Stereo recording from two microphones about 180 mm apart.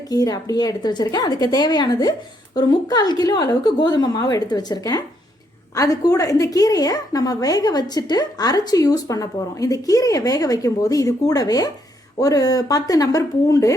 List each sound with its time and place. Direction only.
0.1 s a woman's voice: 20° left (ahead or behind)